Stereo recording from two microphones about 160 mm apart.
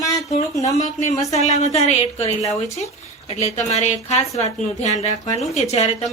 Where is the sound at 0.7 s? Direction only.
50° left (ahead or behind).